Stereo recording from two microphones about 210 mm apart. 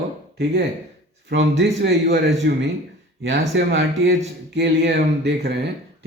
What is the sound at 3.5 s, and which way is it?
Speech, 60° right (ahead or behind).